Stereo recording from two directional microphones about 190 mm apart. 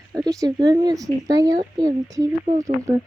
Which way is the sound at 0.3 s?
20° right (ahead or behind).